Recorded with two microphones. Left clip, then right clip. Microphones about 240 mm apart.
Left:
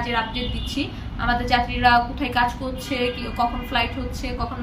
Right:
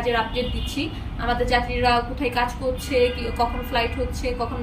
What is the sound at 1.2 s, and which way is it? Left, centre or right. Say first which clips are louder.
A woman's voice: left 1 dB; centre.